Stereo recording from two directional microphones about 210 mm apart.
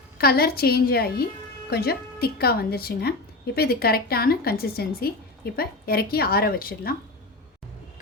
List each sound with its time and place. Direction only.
0.2 s a woman's voice: 45° left (ahead or behind)